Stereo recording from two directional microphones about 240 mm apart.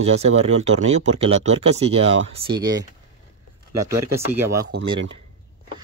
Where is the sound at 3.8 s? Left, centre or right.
Centre.